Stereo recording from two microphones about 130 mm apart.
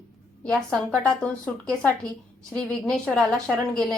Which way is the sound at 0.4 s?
5° left (ahead or behind).